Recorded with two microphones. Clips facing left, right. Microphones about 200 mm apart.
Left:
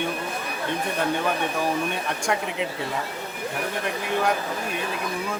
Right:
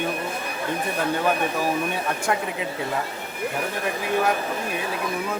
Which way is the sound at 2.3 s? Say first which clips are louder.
Right 1 dB; centre (ahead or behind).